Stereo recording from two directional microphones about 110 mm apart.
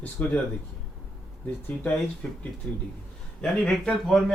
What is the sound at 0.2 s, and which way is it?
Speech, 15° left (ahead or behind).